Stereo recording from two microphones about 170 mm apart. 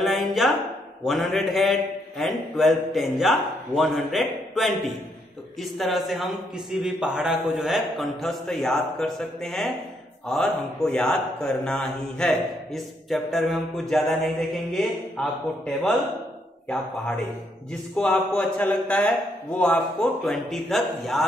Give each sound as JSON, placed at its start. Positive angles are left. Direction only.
{"t": 0.0, "sound": "a sound", "side_deg": 0}
{"t": 1.0, "sound": "speech", "side_deg": 0}
{"t": 17.9, "sound": "speech", "side_deg": 0}